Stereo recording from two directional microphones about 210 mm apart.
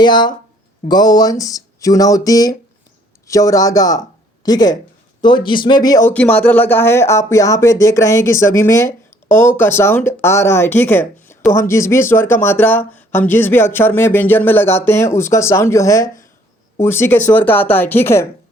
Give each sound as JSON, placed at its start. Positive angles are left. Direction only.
{"t": 0.0, "sound": "speech", "side_deg": 20}